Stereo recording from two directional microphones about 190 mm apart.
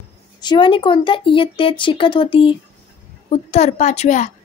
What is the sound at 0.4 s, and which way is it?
A woman's voice, 25° left (ahead or behind).